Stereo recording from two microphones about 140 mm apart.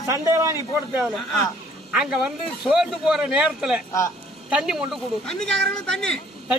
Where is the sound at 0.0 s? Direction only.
20° right (ahead or behind).